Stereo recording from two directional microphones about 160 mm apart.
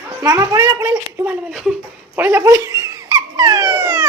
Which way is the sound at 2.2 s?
15° right (ahead or behind).